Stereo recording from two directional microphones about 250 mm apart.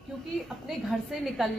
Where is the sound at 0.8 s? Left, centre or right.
Centre.